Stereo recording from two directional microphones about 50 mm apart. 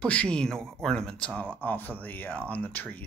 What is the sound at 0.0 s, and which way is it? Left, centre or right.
Speech, centre.